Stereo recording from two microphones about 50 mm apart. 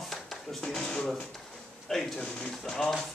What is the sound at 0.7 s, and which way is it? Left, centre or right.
Speech, centre.